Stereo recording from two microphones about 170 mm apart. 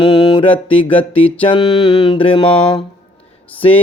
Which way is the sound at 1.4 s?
30° left (ahead or behind).